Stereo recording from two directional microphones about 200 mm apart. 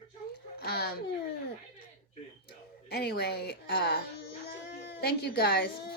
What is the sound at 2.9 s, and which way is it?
Speech, 55° left (ahead or behind).